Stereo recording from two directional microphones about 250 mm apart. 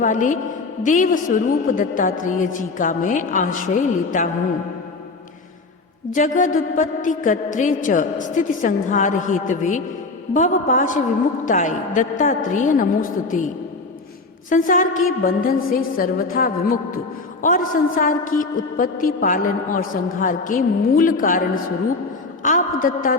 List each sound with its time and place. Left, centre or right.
0.0 s a woman's voice: left
6.1 s a woman's voice: left
14.5 s a woman's voice: left